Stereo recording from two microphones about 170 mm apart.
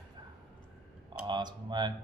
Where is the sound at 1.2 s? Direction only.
25° right (ahead or behind).